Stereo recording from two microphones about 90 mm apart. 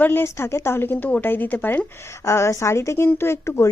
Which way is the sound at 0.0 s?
25° left (ahead or behind).